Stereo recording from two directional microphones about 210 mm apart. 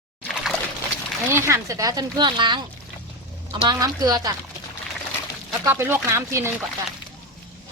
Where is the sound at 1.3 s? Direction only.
10° right (ahead or behind).